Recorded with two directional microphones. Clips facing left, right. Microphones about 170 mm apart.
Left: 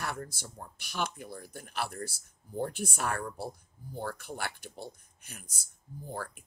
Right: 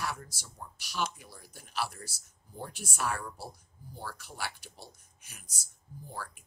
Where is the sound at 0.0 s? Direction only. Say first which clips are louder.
Left 1 dB; 55° left (ahead or behind).